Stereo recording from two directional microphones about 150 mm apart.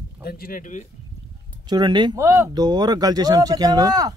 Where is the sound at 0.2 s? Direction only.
85° left; by 0.8 s 60° left (ahead or behind).